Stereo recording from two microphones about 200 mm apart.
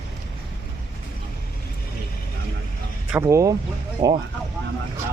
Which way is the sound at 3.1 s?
10° right (ahead or behind).